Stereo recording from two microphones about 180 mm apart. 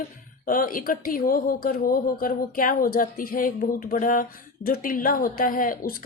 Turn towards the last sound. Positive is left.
turn(degrees=50)  # may be behind; listen again after turning